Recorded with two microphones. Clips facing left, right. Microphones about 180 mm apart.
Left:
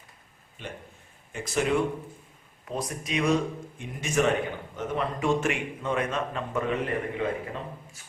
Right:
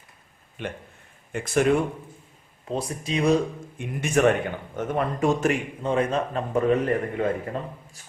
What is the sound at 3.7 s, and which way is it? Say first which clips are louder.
Speech: right 4 dB; 55° right (ahead or behind).